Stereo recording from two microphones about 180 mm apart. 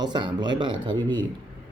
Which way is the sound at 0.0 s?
25° right (ahead or behind).